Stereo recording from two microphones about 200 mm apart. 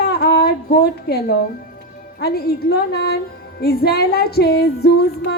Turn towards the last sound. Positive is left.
turn(degrees=55)  # may be behind; listen again after turning